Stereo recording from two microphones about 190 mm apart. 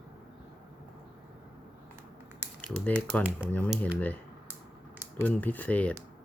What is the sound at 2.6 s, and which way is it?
Speech, 5° left (ahead or behind).